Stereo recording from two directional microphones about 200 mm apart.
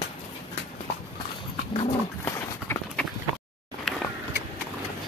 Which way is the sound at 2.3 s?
10° left (ahead or behind).